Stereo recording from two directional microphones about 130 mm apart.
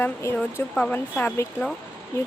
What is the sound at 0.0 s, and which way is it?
Speech, 20° left (ahead or behind).